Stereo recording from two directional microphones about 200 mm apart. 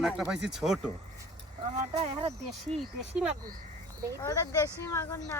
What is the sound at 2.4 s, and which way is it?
Speech, centre (ahead or behind).